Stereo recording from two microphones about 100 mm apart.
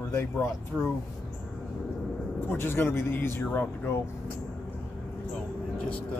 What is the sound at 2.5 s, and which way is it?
Speech, 20° left (ahead or behind).